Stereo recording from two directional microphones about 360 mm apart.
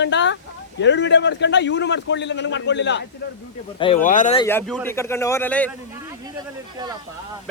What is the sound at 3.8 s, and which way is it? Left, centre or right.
Speech, centre.